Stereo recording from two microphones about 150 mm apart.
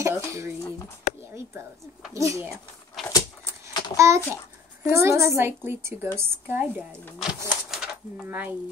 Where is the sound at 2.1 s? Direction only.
20° right (ahead or behind).